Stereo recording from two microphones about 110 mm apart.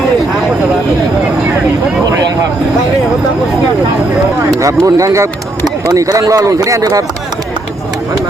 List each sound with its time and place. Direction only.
4.6 s speech: 30° right (ahead or behind)